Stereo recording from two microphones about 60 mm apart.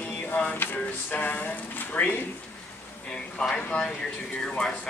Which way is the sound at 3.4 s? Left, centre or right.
Centre.